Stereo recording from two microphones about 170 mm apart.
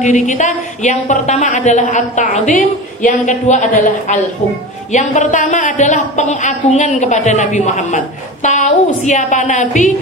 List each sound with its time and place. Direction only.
0.0 s a woman's voice: 45° left (ahead or behind)